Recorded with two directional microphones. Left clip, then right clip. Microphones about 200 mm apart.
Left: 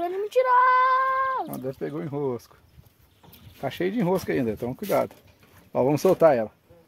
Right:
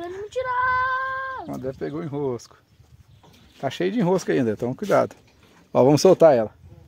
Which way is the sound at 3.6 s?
40° right (ahead or behind).